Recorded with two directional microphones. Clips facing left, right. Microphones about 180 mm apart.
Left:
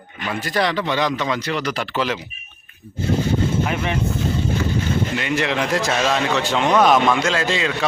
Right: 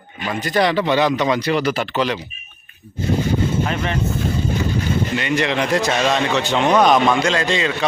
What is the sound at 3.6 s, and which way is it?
Speech, 15° left (ahead or behind).